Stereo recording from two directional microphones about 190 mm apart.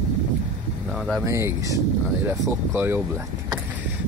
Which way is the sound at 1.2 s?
15° right (ahead or behind).